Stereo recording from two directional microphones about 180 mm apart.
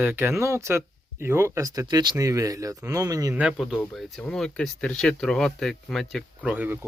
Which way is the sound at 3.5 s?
Centre (ahead or behind).